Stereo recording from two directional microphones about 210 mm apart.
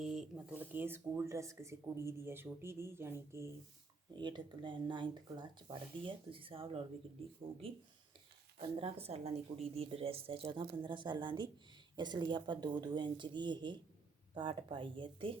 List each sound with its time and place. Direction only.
0.0 s speech: 5° right (ahead or behind); by 6.8 s 25° right (ahead or behind)
8.5 s speech: 25° right (ahead or behind)